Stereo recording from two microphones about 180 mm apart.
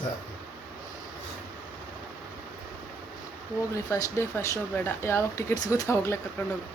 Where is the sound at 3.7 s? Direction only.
15° left (ahead or behind).